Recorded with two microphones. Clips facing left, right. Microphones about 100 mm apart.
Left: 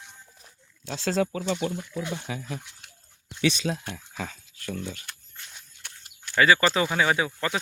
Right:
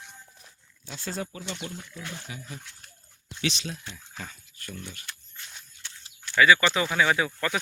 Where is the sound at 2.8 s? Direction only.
90° left.